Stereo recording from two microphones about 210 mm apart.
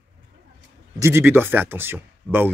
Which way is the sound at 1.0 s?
10° right (ahead or behind).